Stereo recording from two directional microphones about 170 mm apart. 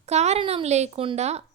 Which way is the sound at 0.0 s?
40° right (ahead or behind).